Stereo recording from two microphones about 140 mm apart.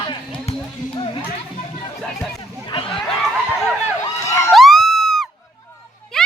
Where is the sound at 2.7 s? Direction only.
40° left (ahead or behind).